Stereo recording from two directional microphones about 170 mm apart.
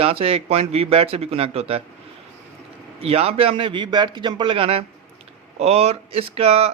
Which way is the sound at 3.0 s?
35° right (ahead or behind).